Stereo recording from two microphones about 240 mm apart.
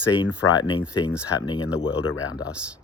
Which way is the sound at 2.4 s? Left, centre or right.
Centre.